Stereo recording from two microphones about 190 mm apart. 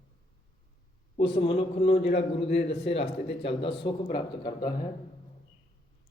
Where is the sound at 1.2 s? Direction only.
30° left (ahead or behind).